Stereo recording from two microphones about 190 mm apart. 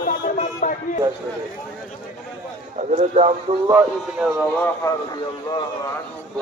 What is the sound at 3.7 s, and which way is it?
Speech, 10° right (ahead or behind).